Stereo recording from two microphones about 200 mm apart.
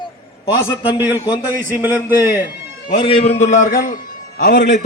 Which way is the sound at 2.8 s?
25° left (ahead or behind).